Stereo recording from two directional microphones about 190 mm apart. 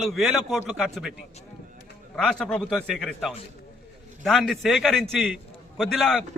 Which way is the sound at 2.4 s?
Centre (ahead or behind).